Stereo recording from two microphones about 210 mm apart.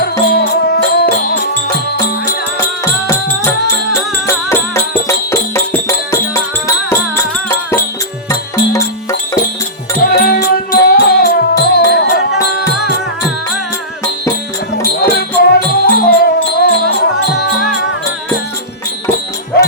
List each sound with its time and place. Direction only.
0.0 s music: 45° left (ahead or behind)
2.6 s music: 15° left (ahead or behind)
10.0 s music: 45° left (ahead or behind)
14.8 s music: 50° left (ahead or behind)
19.5 s dog: 50° left (ahead or behind)